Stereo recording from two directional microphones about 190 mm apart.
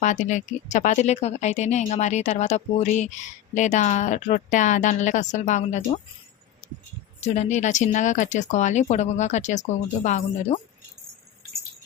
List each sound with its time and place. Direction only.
0.0 s speech: 40° left (ahead or behind)
6.6 s keys jangling: 35° left (ahead or behind)
7.2 s speech: 40° left (ahead or behind)